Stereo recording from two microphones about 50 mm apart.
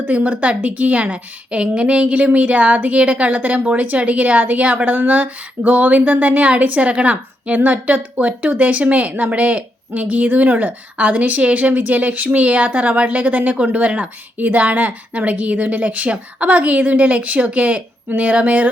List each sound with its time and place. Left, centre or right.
0.1 s a woman's voice: right